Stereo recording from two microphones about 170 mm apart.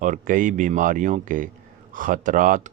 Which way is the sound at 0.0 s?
50° right (ahead or behind).